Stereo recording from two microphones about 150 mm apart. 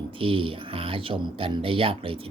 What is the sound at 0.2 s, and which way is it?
Speech, 35° right (ahead or behind).